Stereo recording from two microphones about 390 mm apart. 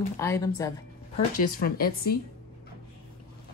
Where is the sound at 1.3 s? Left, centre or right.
Left.